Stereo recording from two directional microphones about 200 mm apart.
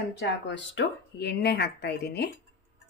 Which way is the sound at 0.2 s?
65° left (ahead or behind).